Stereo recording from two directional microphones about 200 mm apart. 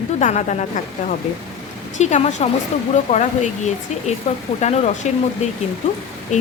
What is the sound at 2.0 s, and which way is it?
Speech, 35° left (ahead or behind).